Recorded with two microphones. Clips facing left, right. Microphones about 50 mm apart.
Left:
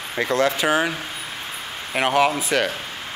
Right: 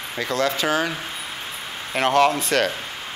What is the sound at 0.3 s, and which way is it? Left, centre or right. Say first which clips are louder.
Speech: left 2 dB; left.